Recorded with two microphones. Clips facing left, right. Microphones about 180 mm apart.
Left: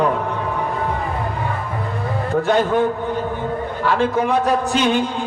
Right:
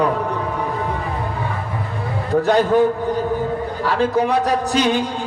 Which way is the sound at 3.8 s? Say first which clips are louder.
Even; 40° right (ahead or behind).